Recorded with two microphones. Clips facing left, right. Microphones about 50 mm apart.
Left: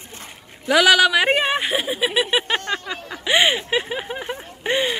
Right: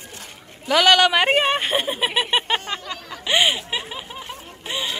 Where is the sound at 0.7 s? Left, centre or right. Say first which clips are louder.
Left 1 dB; centre.